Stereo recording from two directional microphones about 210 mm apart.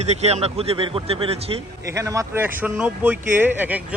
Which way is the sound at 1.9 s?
15° right (ahead or behind).